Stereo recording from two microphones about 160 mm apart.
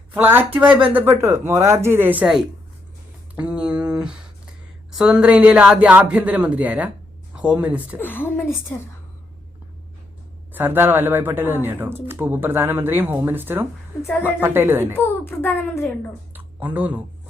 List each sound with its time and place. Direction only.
0.1 s speech: 10° right (ahead or behind)
7.9 s speech: 10° left (ahead or behind)
10.5 s speech: 15° right (ahead or behind)
14.9 s speech: 15° left (ahead or behind)
16.3 s a sound: 10° right (ahead or behind)